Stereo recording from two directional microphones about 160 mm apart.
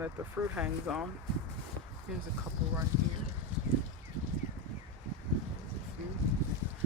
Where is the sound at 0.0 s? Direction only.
10° right (ahead or behind).